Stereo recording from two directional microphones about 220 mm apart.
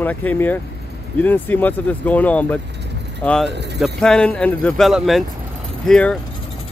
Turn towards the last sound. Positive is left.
turn(degrees=5)  # may be behind; listen again after turning